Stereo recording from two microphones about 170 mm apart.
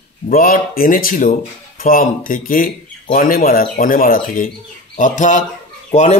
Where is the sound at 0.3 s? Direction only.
55° left (ahead or behind).